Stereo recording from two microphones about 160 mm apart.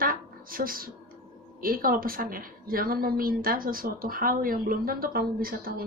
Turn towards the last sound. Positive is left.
turn(degrees=-65)  # may be behind; listen again after turning